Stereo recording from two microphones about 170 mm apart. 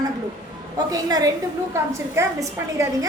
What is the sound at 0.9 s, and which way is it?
A woman's voice, 20° right (ahead or behind).